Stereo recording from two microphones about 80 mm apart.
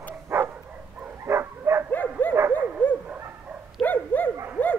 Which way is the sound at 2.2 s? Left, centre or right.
Left.